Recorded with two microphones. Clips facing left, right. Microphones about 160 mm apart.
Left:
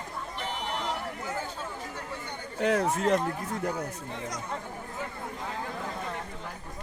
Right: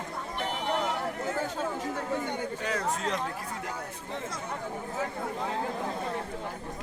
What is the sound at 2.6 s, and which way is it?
Speech, 60° left (ahead or behind).